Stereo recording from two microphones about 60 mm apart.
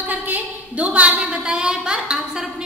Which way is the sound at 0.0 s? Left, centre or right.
Right.